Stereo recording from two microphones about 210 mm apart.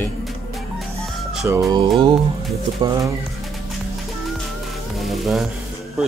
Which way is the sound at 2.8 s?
15° right (ahead or behind).